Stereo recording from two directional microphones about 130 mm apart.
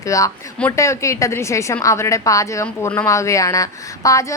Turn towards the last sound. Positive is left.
turn(degrees=25)  # may be behind; listen again after turning